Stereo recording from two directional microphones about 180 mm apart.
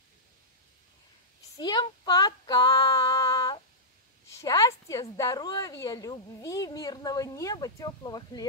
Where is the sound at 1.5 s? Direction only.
25° left (ahead or behind).